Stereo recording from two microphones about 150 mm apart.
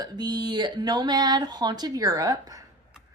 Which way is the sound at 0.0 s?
30° right (ahead or behind).